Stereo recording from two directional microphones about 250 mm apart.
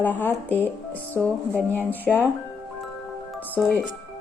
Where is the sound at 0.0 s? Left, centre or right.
Centre.